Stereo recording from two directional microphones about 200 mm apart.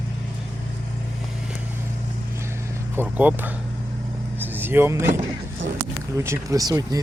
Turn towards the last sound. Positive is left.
turn(degrees=-15)  # may be behind; listen again after turning